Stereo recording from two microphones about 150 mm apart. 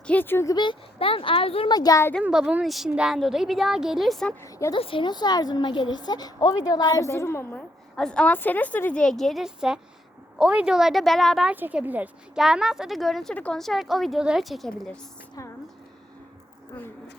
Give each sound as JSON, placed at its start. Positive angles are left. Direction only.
{"t": 0.1, "sound": "speech", "side_deg": 15}
{"t": 0.5, "sound": "speech", "side_deg": 30}
{"t": 2.2, "sound": "a woman's voice", "side_deg": -5}
{"t": 4.7, "sound": "a woman's voice", "side_deg": 35}
{"t": 7.9, "sound": "a woman's voice", "side_deg": 5}
{"t": 11.5, "sound": "a woman's voice", "side_deg": -10}